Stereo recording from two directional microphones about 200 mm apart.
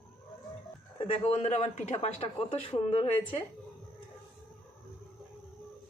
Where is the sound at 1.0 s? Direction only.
25° left (ahead or behind).